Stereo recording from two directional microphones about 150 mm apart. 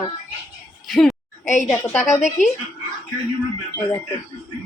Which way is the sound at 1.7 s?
15° left (ahead or behind).